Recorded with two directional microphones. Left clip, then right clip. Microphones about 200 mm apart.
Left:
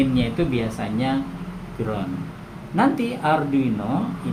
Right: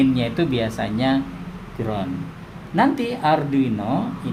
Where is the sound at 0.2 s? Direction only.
35° right (ahead or behind).